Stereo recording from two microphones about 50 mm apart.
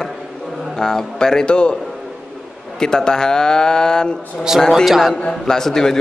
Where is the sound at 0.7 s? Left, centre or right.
Centre.